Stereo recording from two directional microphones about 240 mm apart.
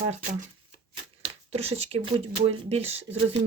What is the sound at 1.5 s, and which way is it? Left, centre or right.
Speech, right.